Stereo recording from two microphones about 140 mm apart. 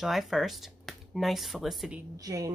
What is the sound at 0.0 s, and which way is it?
Speech, centre (ahead or behind).